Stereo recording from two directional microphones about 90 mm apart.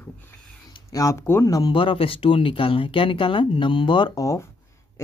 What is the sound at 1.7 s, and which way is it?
Speech, 70° left (ahead or behind).